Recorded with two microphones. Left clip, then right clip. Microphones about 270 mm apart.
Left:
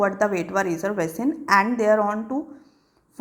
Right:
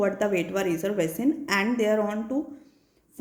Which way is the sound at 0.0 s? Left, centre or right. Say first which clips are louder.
Left 3 dB; centre.